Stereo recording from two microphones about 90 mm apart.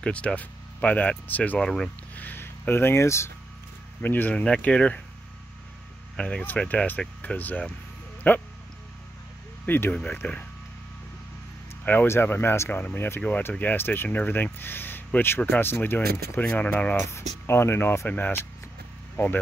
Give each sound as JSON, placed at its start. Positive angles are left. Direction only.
{"t": 0.0, "sound": "speech", "side_deg": 10}
{"t": 1.6, "sound": "speech", "side_deg": 5}
{"t": 2.1, "sound": "speech", "side_deg": 20}
{"t": 4.0, "sound": "speech", "side_deg": 20}
{"t": 6.1, "sound": "speech", "side_deg": 10}
{"t": 9.7, "sound": "speech", "side_deg": 20}
{"t": 11.8, "sound": "speech", "side_deg": 20}